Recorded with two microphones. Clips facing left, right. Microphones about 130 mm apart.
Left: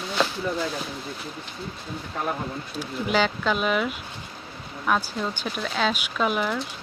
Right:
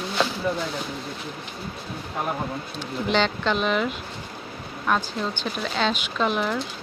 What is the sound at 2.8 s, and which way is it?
Speech, 5° left (ahead or behind).